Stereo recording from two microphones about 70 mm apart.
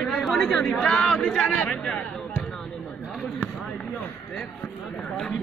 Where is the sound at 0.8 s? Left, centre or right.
Centre.